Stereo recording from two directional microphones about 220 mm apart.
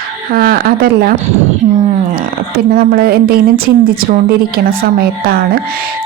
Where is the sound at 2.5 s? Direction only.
45° right (ahead or behind).